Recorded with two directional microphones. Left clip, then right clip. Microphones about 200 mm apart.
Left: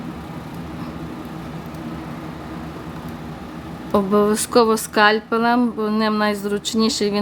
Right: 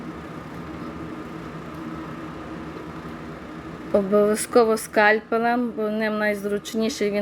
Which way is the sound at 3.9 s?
10° left (ahead or behind).